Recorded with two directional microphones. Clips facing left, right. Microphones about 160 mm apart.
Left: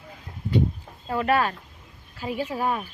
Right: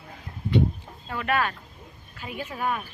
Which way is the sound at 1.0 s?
35° left (ahead or behind).